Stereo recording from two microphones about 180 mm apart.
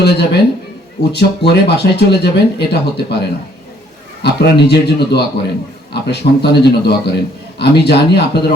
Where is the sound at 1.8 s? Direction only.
60° left (ahead or behind).